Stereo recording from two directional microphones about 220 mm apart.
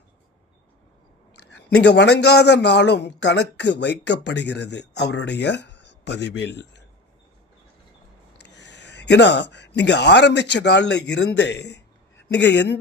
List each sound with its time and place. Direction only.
1.5 s a man's voice: 50° left (ahead or behind)
8.4 s speech: 50° left (ahead or behind)